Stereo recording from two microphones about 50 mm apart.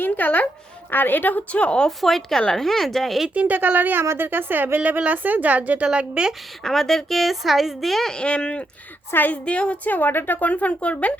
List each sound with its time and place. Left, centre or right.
0.0 s a woman's voice: left
2.0 s a woman's voice: centre
3.2 s speech: right
5.8 s speech: centre
6.6 s a woman's voice: centre
8.1 s a woman's voice: centre
9.9 s a woman's voice: left